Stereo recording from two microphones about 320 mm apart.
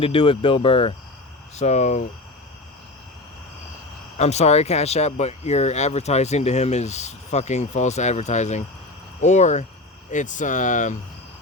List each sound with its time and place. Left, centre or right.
0.0 s speech: centre
4.2 s speech: centre